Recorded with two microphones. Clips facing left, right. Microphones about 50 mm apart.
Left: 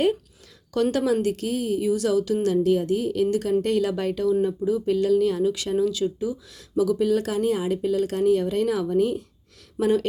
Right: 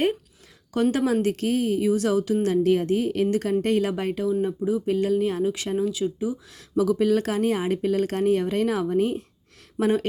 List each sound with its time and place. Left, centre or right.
0.7 s speech: right
1.0 s speech: right
2.5 s a woman's voice: right
5.7 s speech: centre
6.7 s speech: right